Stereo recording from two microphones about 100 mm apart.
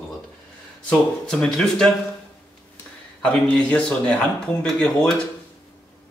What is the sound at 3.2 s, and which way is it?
Speech, 10° left (ahead or behind).